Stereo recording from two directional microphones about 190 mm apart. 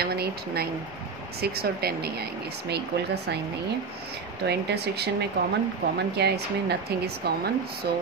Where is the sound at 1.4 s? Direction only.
55° right (ahead or behind).